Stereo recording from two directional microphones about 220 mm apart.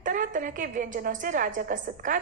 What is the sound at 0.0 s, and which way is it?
A woman's voice, 35° right (ahead or behind).